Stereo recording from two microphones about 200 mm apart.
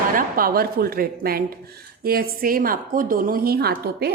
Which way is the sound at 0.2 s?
45° right (ahead or behind).